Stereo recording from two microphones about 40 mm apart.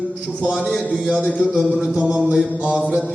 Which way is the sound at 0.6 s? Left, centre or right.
Left.